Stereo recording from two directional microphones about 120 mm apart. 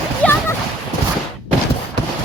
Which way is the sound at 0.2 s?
10° left (ahead or behind).